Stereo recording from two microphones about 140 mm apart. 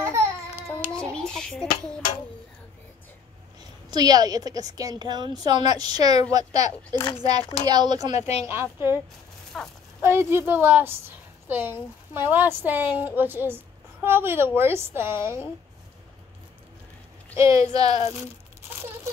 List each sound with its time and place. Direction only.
0.7 s child singing: 15° right (ahead or behind)
0.9 s a sound: 5° left (ahead or behind)
3.9 s a woman's voice: 30° right (ahead or behind)
8.2 s speech: 45° left (ahead or behind)
8.5 s a woman's voice: 15° right (ahead or behind)
9.5 s speech: centre (ahead or behind)
10.0 s a woman's voice: 15° right (ahead or behind)
17.4 s a woman's voice: 25° right (ahead or behind)